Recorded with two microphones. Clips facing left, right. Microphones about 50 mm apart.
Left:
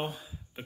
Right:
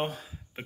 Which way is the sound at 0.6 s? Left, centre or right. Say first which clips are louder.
Right 3 dB; right.